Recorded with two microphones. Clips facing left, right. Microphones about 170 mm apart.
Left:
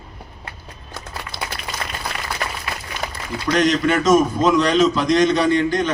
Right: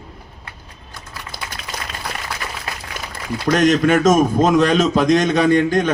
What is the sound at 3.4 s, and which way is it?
A man's voice, 50° right (ahead or behind).